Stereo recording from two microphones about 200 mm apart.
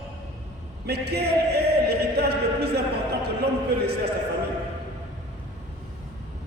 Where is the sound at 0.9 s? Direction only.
55° right (ahead or behind).